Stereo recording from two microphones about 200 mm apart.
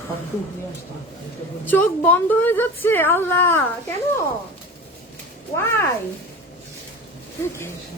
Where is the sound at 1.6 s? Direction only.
10° left (ahead or behind).